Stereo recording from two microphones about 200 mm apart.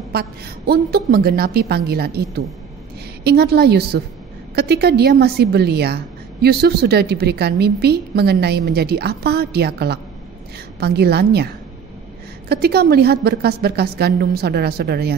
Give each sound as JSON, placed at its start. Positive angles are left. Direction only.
{"t": 0.1, "sound": "a woman's voice", "side_deg": -50}